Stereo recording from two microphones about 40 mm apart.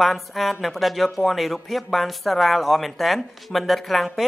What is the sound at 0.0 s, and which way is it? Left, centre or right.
Speech, centre.